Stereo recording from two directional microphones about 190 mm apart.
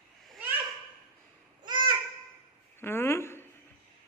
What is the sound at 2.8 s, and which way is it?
Speech, 10° left (ahead or behind).